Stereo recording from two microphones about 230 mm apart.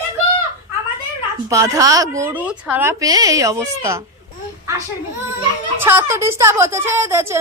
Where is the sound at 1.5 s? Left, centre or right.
Centre.